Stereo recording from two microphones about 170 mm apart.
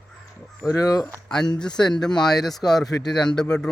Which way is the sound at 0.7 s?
20° left (ahead or behind).